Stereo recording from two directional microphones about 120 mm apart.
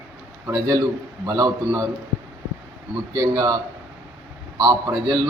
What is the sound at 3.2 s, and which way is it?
Speech, 35° right (ahead or behind).